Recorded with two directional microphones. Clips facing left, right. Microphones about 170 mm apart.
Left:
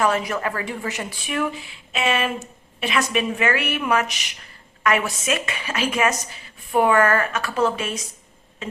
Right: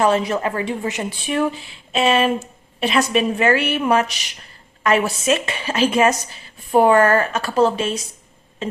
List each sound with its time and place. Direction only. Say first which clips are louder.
0.0 s a woman's voice: right 4 dB; 25° right (ahead or behind)